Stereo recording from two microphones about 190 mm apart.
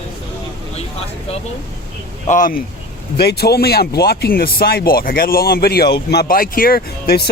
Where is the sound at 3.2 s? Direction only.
55° left (ahead or behind).